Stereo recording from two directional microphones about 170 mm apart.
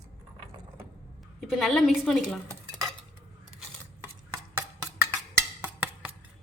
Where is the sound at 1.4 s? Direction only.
Centre (ahead or behind).